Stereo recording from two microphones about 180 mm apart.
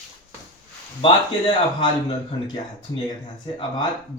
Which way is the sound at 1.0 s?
25° left (ahead or behind).